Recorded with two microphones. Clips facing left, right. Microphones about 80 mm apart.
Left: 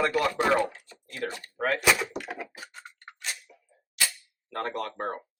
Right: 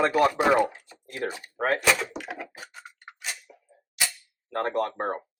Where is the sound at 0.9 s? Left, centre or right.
Right.